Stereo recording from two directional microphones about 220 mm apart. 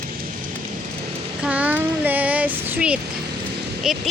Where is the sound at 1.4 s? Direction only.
5° right (ahead or behind).